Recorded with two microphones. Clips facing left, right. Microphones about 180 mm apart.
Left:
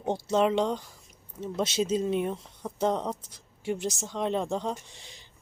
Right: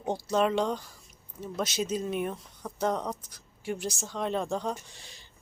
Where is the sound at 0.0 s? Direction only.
25° left (ahead or behind).